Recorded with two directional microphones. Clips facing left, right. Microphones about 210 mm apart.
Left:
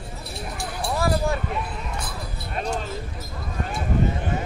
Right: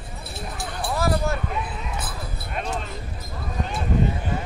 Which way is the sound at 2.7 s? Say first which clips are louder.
Left 2 dB; centre (ahead or behind).